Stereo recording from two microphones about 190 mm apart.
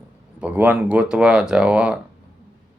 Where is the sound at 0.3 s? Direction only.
10° right (ahead or behind).